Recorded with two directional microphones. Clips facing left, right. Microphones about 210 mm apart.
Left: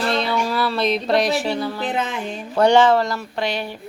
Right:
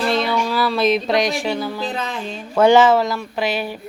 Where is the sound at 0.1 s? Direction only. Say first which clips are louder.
Right 2 dB; centre (ahead or behind).